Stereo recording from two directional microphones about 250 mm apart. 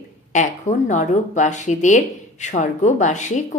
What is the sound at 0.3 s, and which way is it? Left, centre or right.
Speech, left.